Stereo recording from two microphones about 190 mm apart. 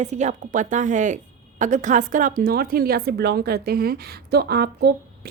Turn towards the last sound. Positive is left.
turn(degrees=-55)  # may be behind; listen again after turning